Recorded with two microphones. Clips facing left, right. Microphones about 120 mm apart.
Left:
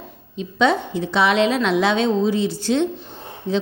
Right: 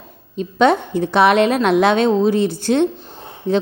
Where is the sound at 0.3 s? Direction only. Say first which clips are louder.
Right 4 dB; 55° right (ahead or behind).